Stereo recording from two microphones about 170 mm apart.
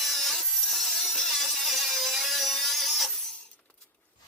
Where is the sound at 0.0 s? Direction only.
Centre (ahead or behind).